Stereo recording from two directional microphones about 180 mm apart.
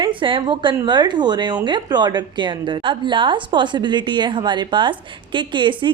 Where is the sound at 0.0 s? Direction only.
30° right (ahead or behind).